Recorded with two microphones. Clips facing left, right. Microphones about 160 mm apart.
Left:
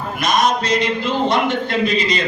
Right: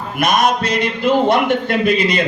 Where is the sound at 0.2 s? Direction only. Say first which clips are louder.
Right 2 dB; 60° right (ahead or behind).